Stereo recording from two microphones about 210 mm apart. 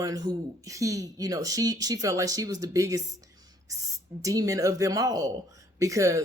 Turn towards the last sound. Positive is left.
turn(degrees=-15)  # may be behind; listen again after turning